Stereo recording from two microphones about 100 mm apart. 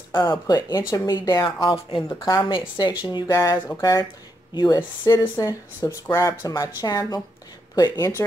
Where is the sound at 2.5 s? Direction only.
50° left (ahead or behind).